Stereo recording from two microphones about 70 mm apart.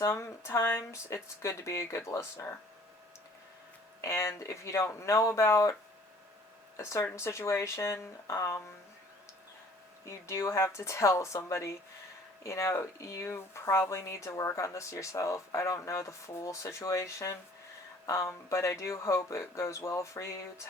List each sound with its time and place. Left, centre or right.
0.0 s speech: left
4.0 s speech: left
7.0 s speech: left
10.1 s speech: left